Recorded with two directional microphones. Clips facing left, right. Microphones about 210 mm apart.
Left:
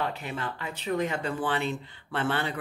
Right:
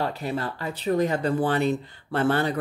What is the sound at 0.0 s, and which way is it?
Speech, 35° right (ahead or behind).